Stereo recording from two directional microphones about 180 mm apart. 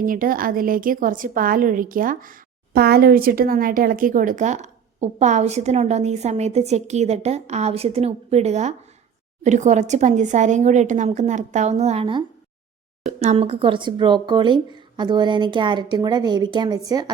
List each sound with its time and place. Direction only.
0.0 s a woman's voice: 50° right (ahead or behind); by 17.1 s 20° right (ahead or behind)